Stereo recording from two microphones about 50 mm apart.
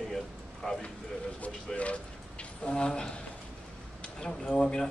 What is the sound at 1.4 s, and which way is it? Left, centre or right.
A man's voice, left.